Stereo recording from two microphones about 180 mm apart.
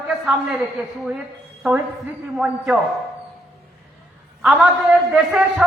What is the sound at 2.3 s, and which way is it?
Speech, 5° right (ahead or behind).